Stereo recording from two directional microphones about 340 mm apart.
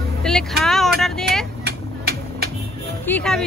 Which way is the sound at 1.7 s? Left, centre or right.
Right.